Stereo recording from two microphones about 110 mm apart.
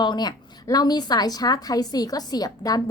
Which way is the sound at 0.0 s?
40° left (ahead or behind).